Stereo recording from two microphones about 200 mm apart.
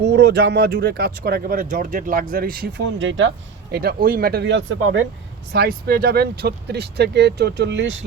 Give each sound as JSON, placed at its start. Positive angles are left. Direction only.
{"t": 0.0, "sound": "speech", "side_deg": -60}
{"t": 5.5, "sound": "speech", "side_deg": -50}